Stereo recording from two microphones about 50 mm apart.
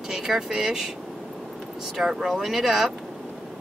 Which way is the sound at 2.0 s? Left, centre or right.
Centre.